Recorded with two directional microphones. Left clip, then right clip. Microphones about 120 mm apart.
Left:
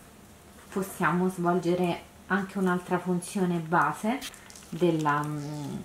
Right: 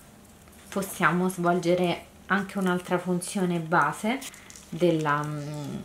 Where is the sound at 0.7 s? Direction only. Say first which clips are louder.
Right 3 dB; 20° right (ahead or behind).